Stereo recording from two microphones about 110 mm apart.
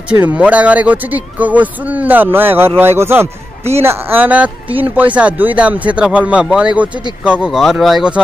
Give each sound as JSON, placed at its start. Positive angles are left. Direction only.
{"t": 0.1, "sound": "speech", "side_deg": -15}